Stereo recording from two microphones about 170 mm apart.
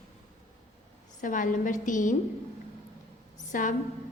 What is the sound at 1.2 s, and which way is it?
Speech, 50° left (ahead or behind).